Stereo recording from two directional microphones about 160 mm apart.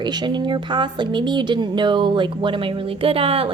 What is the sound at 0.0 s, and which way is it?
A woman's voice, 25° right (ahead or behind).